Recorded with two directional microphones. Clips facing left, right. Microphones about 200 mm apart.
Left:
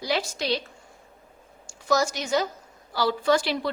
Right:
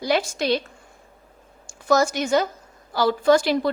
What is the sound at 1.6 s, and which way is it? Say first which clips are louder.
A woman's voice: right 4 dB; 50° right (ahead or behind).